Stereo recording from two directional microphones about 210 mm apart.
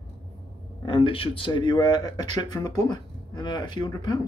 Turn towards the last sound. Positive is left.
turn(degrees=20)  # may be behind; listen again after turning